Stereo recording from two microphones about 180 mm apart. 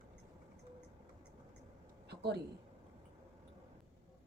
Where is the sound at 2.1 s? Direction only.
65° right (ahead or behind).